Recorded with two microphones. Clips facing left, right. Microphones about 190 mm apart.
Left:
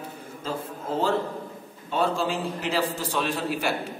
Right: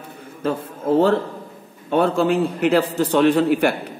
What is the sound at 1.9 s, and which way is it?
A man's voice, 60° right (ahead or behind).